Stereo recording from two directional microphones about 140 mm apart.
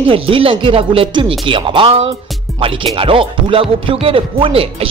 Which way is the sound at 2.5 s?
Centre (ahead or behind).